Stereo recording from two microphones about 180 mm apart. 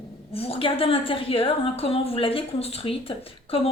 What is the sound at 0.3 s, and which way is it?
A woman's voice, 30° left (ahead or behind).